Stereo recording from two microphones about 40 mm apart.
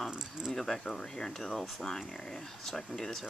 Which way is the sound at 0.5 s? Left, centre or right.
Centre.